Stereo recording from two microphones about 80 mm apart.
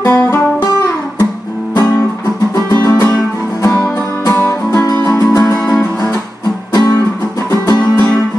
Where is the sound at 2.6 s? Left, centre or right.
Left.